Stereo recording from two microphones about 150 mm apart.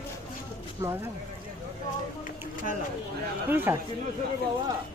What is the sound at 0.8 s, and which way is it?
Speech, 15° right (ahead or behind).